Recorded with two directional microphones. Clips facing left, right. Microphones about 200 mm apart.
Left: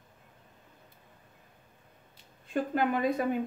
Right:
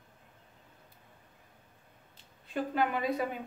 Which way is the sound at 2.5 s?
50° left (ahead or behind).